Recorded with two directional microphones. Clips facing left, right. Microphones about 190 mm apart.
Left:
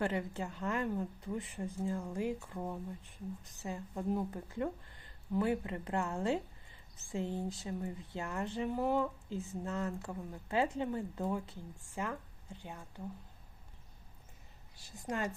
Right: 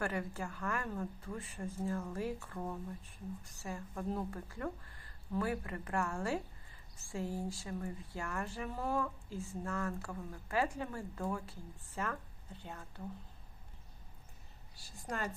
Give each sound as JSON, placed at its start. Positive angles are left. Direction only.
{"t": 0.0, "sound": "a woman's voice", "side_deg": 20}
{"t": 14.8, "sound": "a woman's voice", "side_deg": 20}